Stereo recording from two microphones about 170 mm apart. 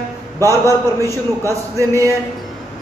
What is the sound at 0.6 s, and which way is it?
A man's voice, 20° right (ahead or behind).